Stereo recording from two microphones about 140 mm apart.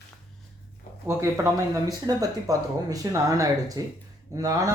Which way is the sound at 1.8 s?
25° right (ahead or behind).